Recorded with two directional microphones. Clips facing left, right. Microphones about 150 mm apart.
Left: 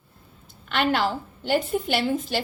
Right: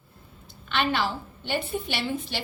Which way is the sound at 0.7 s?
45° left (ahead or behind).